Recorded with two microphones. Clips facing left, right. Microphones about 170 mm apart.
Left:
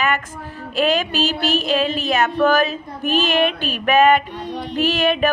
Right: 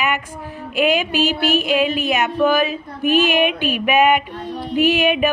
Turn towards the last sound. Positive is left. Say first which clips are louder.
# right 2 dB
turn(degrees=-15)  # may be behind; listen again after turning